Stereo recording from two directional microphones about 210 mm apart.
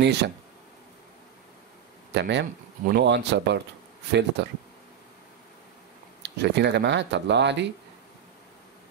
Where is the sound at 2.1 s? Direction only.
55° right (ahead or behind).